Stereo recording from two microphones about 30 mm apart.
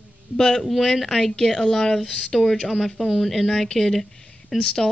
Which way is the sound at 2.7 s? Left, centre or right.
Centre.